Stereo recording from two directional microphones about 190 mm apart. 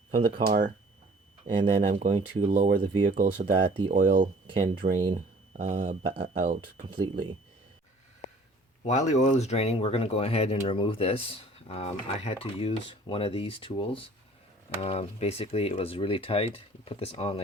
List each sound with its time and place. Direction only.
0.4 s speech: 50° right (ahead or behind)
1.9 s speech: 40° right (ahead or behind)
2.7 s speech: 25° right (ahead or behind)
3.0 s speech: 45° right (ahead or behind)
3.3 s speech: 25° right (ahead or behind)
3.9 s speech: 45° right (ahead or behind)
4.4 s speech: 25° right (ahead or behind)
8.8 s speech: 35° left (ahead or behind)